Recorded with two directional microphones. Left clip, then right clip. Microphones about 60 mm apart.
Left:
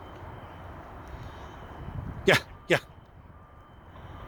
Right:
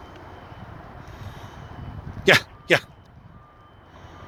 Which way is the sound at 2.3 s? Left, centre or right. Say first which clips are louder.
Right 6 dB; centre.